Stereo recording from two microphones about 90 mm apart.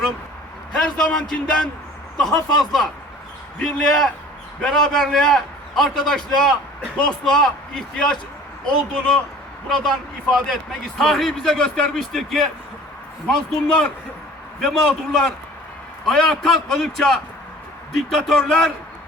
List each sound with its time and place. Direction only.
0.7 s a man's voice: 5° left (ahead or behind)